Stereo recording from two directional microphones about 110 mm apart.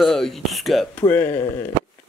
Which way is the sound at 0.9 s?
15° left (ahead or behind).